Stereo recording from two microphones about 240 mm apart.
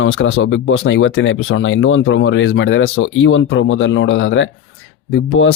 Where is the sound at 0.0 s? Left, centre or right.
Left.